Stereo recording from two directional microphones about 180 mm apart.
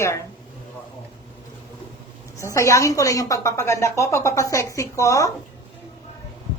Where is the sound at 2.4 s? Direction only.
15° left (ahead or behind).